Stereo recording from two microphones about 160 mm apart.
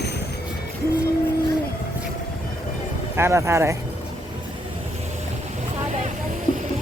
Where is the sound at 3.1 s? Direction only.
15° right (ahead or behind).